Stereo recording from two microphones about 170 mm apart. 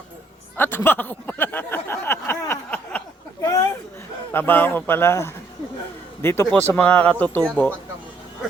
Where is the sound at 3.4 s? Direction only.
20° left (ahead or behind).